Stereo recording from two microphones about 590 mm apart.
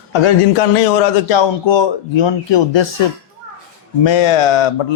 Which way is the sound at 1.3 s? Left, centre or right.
Left.